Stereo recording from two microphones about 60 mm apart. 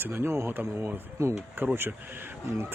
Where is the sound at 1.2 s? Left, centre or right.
Right.